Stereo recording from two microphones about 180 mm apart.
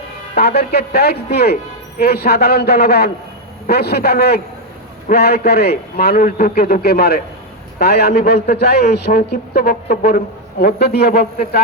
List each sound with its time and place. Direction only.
0.3 s speech: 65° left (ahead or behind)